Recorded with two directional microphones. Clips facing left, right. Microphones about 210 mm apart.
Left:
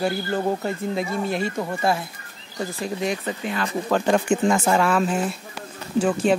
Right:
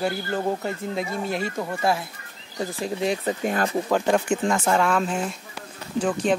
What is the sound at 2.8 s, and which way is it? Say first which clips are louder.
Speech: right 2 dB; 30° right (ahead or behind).